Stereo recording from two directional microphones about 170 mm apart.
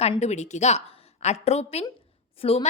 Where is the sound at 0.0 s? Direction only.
40° left (ahead or behind).